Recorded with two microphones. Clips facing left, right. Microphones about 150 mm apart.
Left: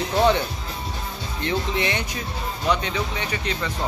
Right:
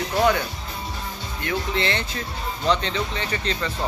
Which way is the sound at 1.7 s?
15° left (ahead or behind).